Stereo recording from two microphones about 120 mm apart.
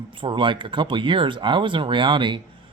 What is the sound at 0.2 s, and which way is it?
Speech, 45° right (ahead or behind).